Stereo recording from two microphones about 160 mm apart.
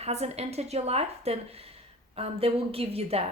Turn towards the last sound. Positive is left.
turn(degrees=-40)  # may be behind; listen again after turning